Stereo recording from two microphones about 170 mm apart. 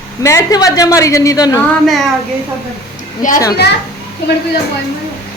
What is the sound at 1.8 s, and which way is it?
Speech, centre (ahead or behind).